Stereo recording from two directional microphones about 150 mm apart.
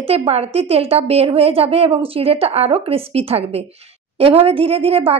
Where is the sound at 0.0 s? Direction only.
40° right (ahead or behind).